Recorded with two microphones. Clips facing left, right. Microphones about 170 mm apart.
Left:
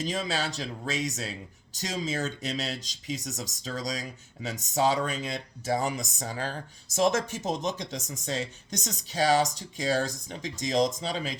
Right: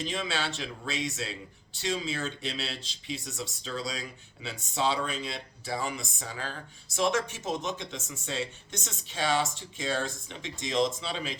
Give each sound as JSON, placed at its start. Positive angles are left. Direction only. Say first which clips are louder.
{"t": 0.0, "sound": "speech", "louder": "left 2 dB", "side_deg": 40}